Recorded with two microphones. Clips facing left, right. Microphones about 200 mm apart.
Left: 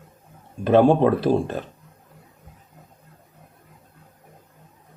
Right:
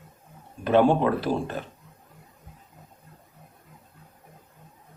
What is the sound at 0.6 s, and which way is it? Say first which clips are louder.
Speech: left 4 dB; 35° left (ahead or behind).